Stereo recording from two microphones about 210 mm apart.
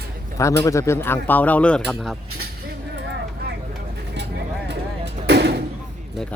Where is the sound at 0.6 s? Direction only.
15° left (ahead or behind).